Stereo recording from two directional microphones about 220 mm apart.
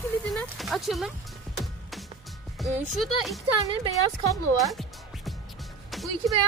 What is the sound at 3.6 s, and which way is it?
Speech, 25° right (ahead or behind).